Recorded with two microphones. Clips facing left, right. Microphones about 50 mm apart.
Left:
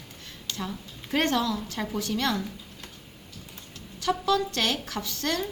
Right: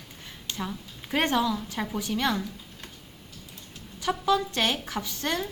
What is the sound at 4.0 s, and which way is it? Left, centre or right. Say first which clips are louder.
Speech: even; centre.